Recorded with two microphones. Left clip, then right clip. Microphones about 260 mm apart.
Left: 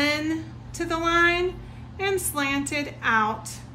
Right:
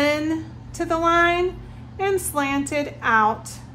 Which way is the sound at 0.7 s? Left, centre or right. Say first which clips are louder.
Right 4 dB; right.